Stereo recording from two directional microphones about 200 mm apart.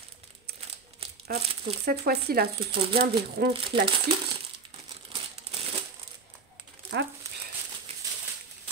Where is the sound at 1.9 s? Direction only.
50° right (ahead or behind).